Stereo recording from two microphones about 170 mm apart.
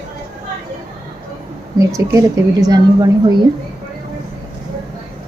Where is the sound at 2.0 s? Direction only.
20° right (ahead or behind).